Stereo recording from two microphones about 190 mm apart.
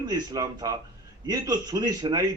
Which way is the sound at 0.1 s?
20° right (ahead or behind).